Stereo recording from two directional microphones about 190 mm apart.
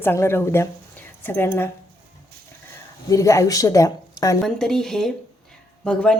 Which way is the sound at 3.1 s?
15° left (ahead or behind).